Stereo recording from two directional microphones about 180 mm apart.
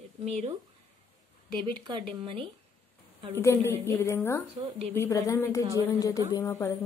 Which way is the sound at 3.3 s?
15° left (ahead or behind).